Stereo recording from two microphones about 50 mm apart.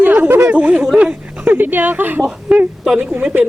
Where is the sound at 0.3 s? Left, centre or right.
Right.